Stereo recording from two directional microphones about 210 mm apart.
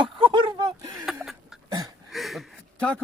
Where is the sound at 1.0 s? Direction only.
Centre (ahead or behind).